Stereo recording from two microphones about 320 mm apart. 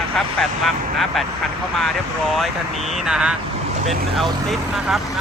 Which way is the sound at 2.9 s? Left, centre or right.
Centre.